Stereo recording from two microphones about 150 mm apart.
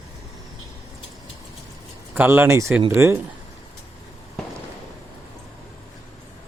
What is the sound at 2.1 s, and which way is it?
Speech, 15° right (ahead or behind).